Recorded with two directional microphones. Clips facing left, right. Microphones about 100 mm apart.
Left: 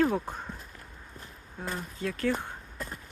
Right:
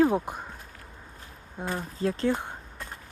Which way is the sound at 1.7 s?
35° right (ahead or behind).